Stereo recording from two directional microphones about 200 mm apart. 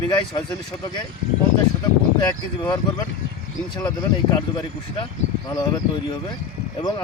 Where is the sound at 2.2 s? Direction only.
20° left (ahead or behind).